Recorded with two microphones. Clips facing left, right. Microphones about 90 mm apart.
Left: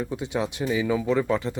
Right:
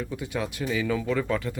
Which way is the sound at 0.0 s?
25° left (ahead or behind).